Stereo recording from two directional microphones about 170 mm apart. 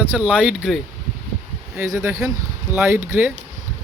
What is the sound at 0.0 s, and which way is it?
Speech, 10° right (ahead or behind).